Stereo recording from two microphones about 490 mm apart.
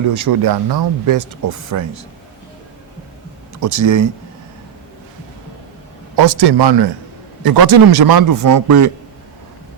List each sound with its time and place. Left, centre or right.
0.1 s speech: right
3.6 s speech: right
6.1 s a man's voice: right